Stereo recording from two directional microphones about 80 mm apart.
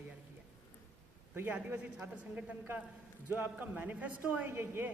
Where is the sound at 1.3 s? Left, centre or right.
Right.